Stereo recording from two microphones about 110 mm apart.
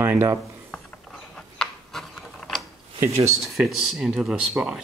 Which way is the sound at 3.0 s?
25° right (ahead or behind).